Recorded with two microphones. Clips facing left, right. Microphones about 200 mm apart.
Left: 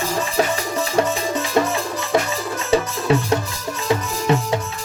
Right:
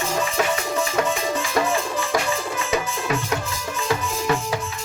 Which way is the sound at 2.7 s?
30° left (ahead or behind).